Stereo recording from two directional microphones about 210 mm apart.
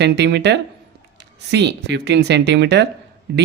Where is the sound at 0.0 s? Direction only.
55° right (ahead or behind).